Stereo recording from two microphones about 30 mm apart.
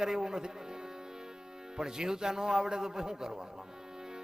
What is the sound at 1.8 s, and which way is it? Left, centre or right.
A man's voice, right.